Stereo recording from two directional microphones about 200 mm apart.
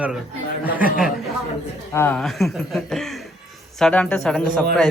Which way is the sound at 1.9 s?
5° left (ahead or behind).